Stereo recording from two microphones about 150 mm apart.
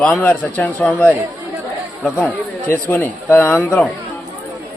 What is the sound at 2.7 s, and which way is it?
Speech, 15° left (ahead or behind).